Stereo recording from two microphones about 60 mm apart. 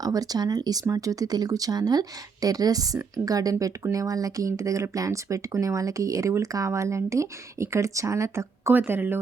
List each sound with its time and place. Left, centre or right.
0.0 s speech: right
6.7 s speech: right
8.7 s speech: right